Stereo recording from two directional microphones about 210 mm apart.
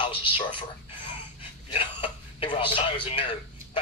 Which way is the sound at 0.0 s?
25° left (ahead or behind).